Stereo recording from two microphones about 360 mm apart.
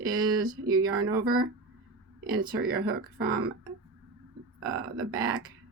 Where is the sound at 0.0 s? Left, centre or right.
Right.